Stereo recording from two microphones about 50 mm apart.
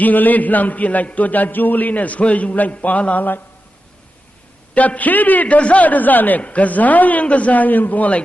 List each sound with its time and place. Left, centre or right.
0.0 s a man's voice: left
4.7 s a man's voice: left